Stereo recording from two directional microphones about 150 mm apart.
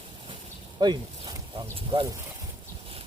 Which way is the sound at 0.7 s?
30° right (ahead or behind).